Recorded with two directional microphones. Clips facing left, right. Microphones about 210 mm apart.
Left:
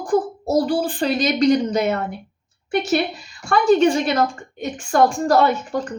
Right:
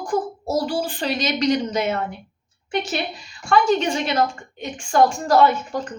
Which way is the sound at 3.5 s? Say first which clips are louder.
Left 4 dB; 40° left (ahead or behind).